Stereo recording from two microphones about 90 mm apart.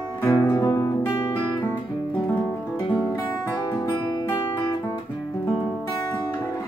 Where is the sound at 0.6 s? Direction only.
30° left (ahead or behind).